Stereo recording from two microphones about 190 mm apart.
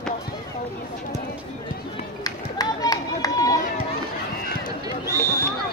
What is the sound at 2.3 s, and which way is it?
Run, 20° left (ahead or behind).